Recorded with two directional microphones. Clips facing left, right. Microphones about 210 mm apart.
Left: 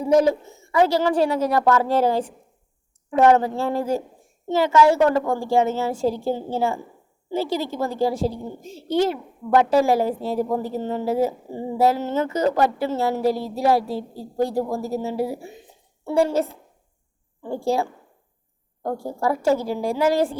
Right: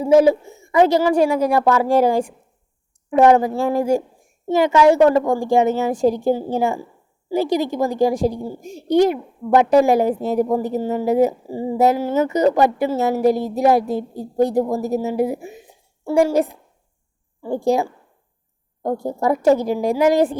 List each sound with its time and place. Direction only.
0.1 s a woman's voice: 10° right (ahead or behind)